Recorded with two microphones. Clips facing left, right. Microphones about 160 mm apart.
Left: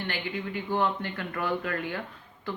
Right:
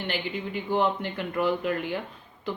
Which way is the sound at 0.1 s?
15° right (ahead or behind).